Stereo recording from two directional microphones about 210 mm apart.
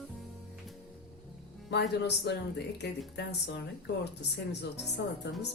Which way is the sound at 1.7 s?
55° left (ahead or behind).